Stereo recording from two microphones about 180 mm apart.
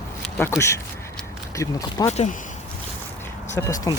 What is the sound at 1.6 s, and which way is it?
Speech, 15° left (ahead or behind).